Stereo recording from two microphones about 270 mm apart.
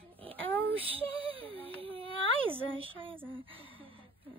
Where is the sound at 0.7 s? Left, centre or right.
Centre.